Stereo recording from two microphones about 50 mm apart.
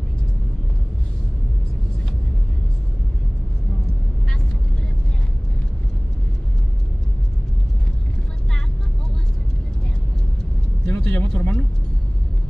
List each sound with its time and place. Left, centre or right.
10.9 s vehicle: left